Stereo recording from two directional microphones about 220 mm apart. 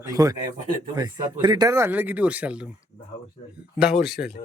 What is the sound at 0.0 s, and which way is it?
Speech, 15° right (ahead or behind).